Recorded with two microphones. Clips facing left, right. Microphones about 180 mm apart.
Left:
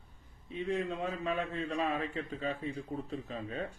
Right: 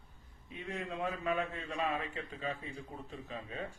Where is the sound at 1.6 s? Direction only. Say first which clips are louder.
Left 3 dB; 35° left (ahead or behind).